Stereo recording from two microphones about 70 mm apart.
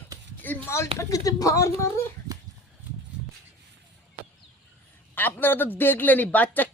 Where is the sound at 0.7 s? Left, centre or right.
Left.